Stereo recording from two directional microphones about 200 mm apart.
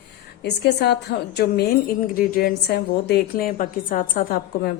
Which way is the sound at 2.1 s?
45° left (ahead or behind).